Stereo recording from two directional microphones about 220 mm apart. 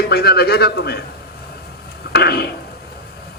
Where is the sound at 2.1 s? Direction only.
45° left (ahead or behind).